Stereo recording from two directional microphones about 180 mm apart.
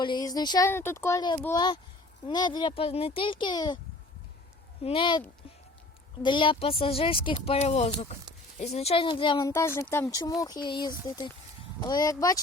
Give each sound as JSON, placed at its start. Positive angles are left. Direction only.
{"t": 0.0, "sound": "a child's voice", "side_deg": 25}
{"t": 4.8, "sound": "a child's voice", "side_deg": 30}
{"t": 6.2, "sound": "a child's voice", "side_deg": 25}
{"t": 9.5, "sound": "a child's voice", "side_deg": 15}